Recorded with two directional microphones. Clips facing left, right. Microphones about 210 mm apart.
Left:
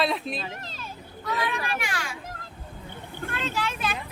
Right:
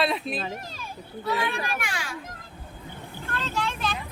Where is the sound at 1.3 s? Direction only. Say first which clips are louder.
Right 1 dB; 30° right (ahead or behind).